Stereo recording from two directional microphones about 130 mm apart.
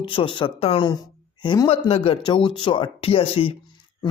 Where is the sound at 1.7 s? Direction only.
50° left (ahead or behind).